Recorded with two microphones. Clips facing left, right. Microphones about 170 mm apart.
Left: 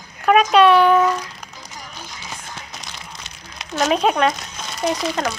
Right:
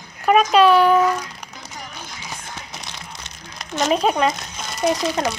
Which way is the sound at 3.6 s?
Centre (ahead or behind).